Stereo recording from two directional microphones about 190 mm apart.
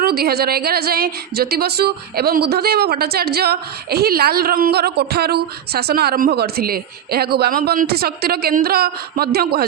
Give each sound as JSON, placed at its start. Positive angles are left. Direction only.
{"t": 0.0, "sound": "speech", "side_deg": -55}